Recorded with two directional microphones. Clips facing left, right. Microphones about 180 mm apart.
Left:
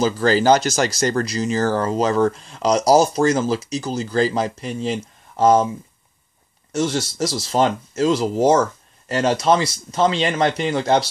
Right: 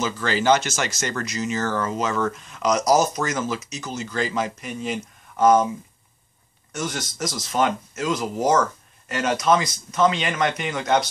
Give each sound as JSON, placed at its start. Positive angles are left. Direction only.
{"t": 0.0, "sound": "speech", "side_deg": 35}
{"t": 6.7, "sound": "speech", "side_deg": 30}